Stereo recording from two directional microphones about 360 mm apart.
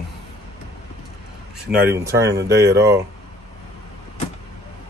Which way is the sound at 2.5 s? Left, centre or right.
Right.